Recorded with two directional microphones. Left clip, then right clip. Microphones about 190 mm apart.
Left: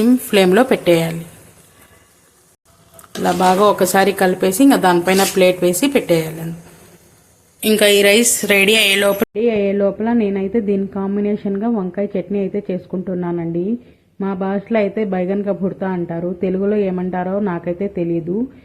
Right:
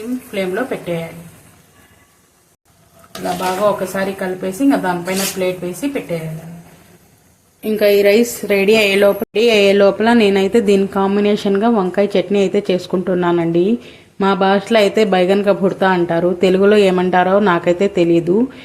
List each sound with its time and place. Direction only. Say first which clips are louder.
0.3 s speech: left 6 dB; 60° left (ahead or behind)
3.9 s speech: left 6 dB; 65° left (ahead or behind)
7.6 s speech: even; centre (ahead or behind)
9.3 s speech: right 5 dB; 15° right (ahead or behind)